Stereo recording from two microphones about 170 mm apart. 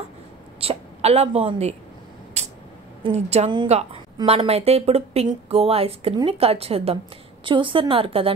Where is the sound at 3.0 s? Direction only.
40° right (ahead or behind).